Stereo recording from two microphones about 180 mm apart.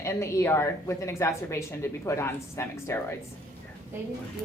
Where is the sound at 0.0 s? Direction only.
15° left (ahead or behind).